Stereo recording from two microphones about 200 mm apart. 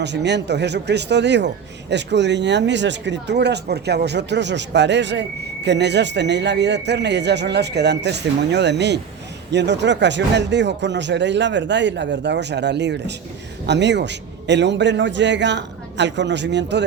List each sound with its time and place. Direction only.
0.0 s speech: 60° right (ahead or behind)